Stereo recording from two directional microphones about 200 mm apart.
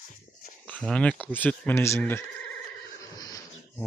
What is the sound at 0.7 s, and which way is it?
Speech, 5° left (ahead or behind).